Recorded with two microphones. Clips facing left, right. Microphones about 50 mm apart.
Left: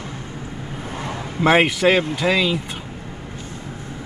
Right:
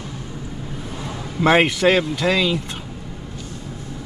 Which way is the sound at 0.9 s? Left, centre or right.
Left.